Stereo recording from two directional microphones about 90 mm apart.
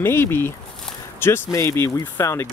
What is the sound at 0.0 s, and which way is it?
Speech, 25° left (ahead or behind).